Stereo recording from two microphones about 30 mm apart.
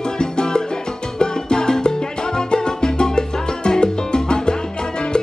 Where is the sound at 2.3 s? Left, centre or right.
Left.